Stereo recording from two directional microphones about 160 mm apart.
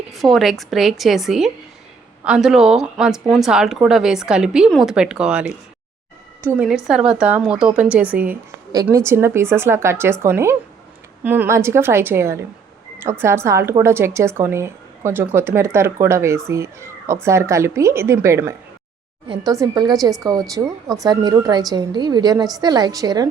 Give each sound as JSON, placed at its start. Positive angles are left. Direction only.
{"t": 0.1, "sound": "speech", "side_deg": 0}
{"t": 6.6, "sound": "a woman's voice", "side_deg": -5}